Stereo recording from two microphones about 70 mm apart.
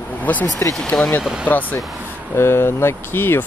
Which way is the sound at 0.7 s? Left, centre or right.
Centre.